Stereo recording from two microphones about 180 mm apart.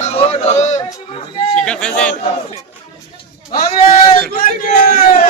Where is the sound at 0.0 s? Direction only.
35° left (ahead or behind).